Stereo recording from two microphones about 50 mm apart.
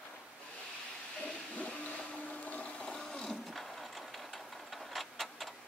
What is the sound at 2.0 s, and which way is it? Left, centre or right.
Blender, left.